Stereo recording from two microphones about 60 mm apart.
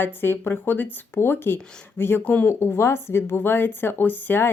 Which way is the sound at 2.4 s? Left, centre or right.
Left.